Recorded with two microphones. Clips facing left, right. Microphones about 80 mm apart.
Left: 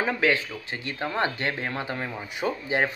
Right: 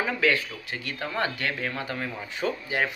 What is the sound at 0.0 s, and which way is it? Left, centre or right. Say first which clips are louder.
Speech: left 1 dB; left.